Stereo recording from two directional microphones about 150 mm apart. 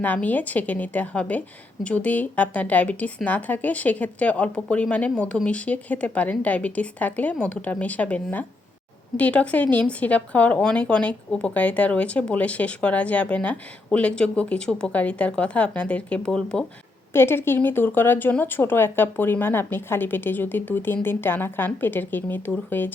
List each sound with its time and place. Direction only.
0.0 s a woman's voice: 10° left (ahead or behind)
17.1 s a woman's voice: 15° left (ahead or behind)